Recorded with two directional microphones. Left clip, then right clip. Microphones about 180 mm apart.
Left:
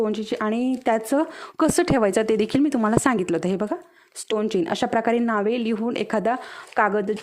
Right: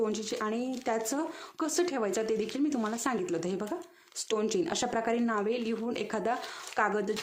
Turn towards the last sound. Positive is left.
turn(degrees=40)  # may be behind; listen again after turning